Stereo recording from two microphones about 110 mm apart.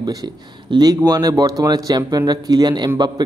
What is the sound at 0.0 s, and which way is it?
Speech, 40° right (ahead or behind).